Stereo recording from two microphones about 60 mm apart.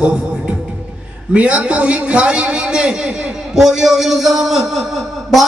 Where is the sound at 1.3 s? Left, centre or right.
Right.